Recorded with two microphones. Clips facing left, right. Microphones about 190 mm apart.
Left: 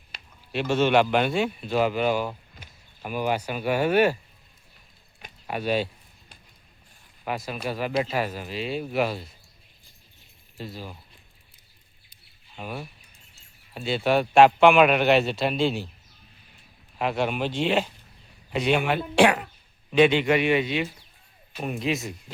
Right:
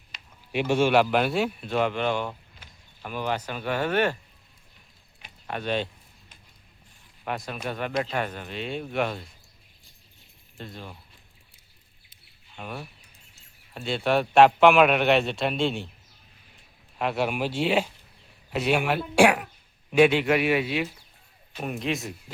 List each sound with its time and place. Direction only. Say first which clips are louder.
0.1 s a sound: left 2 dB; 35° left (ahead or behind)
0.5 s speech: even; 10° right (ahead or behind); by 4.2 s 10° left (ahead or behind)
5.5 s speech: left 3 dB; 10° left (ahead or behind)
7.3 s a man's voice: left 2 dB; centre (ahead or behind)
10.6 s a man's voice: left 3 dB; 5° left (ahead or behind)
12.5 s a man's voice: left 2 dB; 5° left (ahead or behind)
17.0 s a man's voice: left 1 dB; centre (ahead or behind)